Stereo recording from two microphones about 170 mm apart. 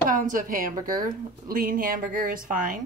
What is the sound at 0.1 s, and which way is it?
A woman's voice, 55° right (ahead or behind).